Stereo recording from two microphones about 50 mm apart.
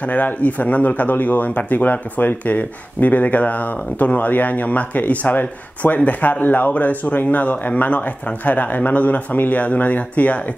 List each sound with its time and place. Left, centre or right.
0.0 s speech: left